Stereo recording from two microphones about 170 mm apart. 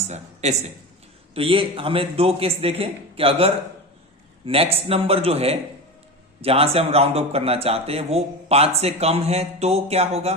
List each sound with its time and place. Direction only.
0.0 s speech: 40° right (ahead or behind)